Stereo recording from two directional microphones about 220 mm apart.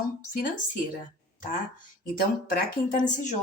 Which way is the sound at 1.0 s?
35° left (ahead or behind).